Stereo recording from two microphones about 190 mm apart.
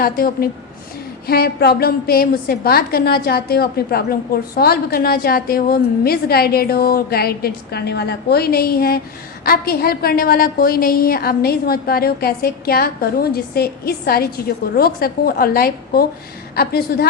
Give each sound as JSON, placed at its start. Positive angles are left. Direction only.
{"t": 0.0, "sound": "a woman's voice", "side_deg": 50}